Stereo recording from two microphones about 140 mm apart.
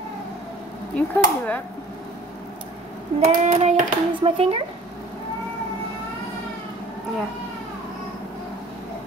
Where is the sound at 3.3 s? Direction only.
55° right (ahead or behind).